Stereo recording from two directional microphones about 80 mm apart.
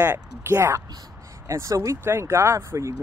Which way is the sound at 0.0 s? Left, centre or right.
Right.